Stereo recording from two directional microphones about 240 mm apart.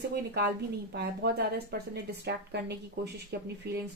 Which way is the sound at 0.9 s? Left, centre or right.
Right.